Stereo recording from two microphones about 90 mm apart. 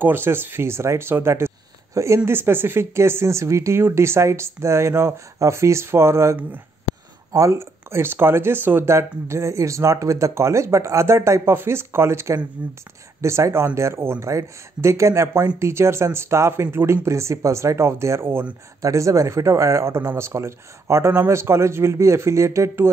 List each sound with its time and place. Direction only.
0.0 s speech: 25° right (ahead or behind)
7.3 s speech: 30° right (ahead or behind)
12.6 s speech: 15° right (ahead or behind)
13.2 s speech: 30° right (ahead or behind)
18.8 s speech: 35° right (ahead or behind)